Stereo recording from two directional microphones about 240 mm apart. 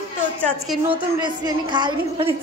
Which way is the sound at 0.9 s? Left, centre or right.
Centre.